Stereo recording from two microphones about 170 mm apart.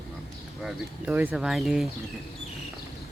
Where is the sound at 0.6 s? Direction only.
10° right (ahead or behind).